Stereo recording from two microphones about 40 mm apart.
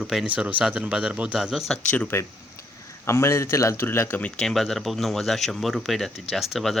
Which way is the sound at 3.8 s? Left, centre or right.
Left.